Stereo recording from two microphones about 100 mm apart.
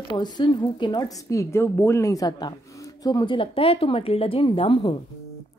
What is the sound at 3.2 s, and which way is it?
Speech, 60° left (ahead or behind).